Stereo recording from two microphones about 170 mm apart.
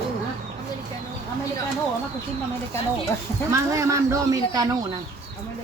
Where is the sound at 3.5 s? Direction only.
20° right (ahead or behind).